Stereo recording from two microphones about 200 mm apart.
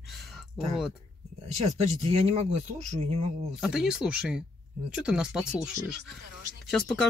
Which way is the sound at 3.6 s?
5° right (ahead or behind).